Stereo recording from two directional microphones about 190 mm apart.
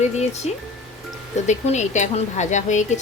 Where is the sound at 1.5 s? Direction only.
40° left (ahead or behind).